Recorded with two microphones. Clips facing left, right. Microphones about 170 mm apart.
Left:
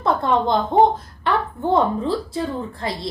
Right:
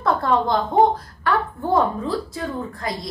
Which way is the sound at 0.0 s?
20° left (ahead or behind).